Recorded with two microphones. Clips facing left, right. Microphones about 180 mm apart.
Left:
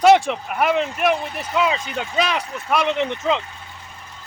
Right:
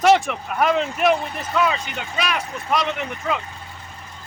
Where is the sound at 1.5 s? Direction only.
15° left (ahead or behind).